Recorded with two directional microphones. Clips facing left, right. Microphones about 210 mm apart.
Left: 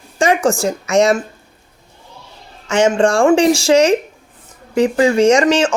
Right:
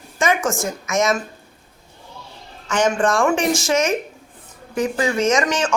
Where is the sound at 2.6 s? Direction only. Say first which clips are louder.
Left 5 dB; 25° left (ahead or behind).